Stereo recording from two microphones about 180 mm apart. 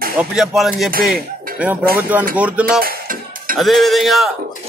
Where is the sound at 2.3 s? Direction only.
5° right (ahead or behind).